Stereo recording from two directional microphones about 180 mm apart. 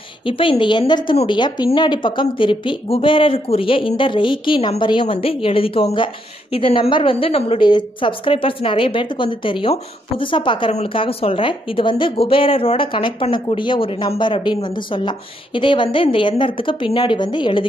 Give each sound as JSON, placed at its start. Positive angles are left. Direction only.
{"t": 0.2, "sound": "a woman's voice", "side_deg": 30}